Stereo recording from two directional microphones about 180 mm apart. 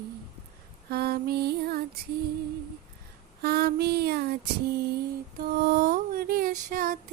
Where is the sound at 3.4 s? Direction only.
60° right (ahead or behind).